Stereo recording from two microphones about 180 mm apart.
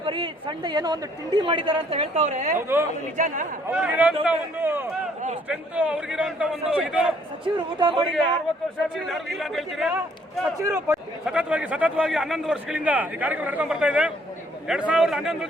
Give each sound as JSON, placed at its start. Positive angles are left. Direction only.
{"t": 0.0, "sound": "a man's voice", "side_deg": -30}
{"t": 2.6, "sound": "a man's voice", "side_deg": -15}
{"t": 3.2, "sound": "a man's voice", "side_deg": -45}
{"t": 3.7, "sound": "a man's voice", "side_deg": -10}
{"t": 7.4, "sound": "a man's voice", "side_deg": -25}
{"t": 9.0, "sound": "a man's voice", "side_deg": 0}
{"t": 10.6, "sound": "a man's voice", "side_deg": -15}
{"t": 11.3, "sound": "a man's voice", "side_deg": -5}